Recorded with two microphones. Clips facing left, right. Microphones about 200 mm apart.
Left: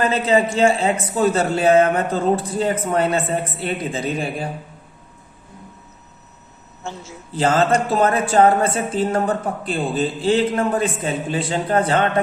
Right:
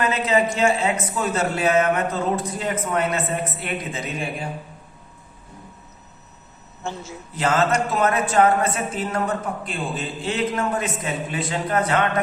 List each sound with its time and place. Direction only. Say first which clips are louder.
0.0 s a man's voice: left 3 dB; 30° left (ahead or behind)
7.3 s a woman's voice: left 3 dB; 30° left (ahead or behind)